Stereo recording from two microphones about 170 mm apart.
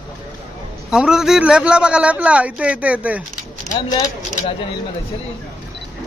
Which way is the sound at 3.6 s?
25° left (ahead or behind).